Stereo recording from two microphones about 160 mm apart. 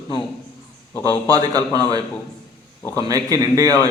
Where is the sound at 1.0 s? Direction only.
20° right (ahead or behind).